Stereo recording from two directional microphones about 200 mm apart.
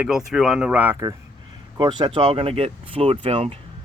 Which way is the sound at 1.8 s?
25° right (ahead or behind).